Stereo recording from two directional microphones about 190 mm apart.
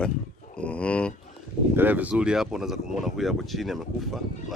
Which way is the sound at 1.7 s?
10° right (ahead or behind).